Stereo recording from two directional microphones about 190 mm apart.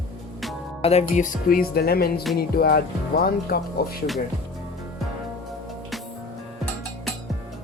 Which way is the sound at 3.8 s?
55° left (ahead or behind).